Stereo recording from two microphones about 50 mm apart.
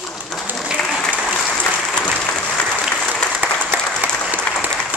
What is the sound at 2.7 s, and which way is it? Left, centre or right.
Applause, centre.